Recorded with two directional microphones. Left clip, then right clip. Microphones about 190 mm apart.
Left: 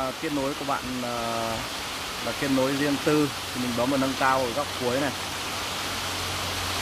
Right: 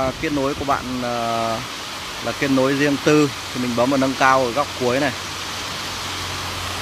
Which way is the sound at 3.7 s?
20° right (ahead or behind).